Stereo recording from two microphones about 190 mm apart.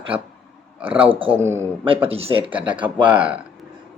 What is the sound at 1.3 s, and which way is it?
Speech, 10° right (ahead or behind).